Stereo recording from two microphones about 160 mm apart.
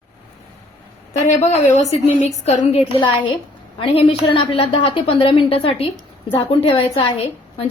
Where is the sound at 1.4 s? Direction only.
45° left (ahead or behind).